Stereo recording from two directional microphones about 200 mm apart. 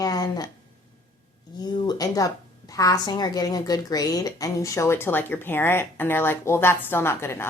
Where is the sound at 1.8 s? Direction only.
20° left (ahead or behind).